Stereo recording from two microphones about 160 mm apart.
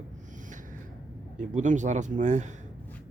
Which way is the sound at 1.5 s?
50° right (ahead or behind).